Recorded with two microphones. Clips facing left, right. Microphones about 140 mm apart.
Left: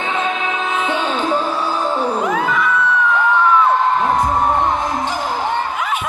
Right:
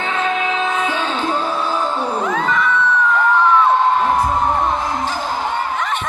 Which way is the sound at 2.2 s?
10° left (ahead or behind).